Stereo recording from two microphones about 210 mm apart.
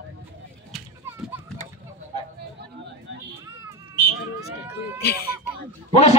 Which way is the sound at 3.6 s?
15° right (ahead or behind).